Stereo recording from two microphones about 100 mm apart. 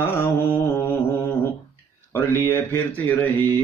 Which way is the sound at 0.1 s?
25° left (ahead or behind).